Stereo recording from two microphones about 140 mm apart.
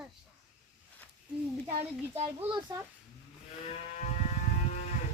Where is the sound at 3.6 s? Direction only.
60° left (ahead or behind).